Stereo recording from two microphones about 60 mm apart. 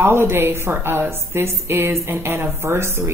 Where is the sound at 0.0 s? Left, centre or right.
Right.